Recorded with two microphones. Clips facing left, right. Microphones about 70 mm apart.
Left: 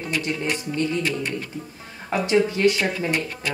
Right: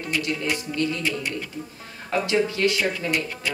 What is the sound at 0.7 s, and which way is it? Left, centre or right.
Speech, left.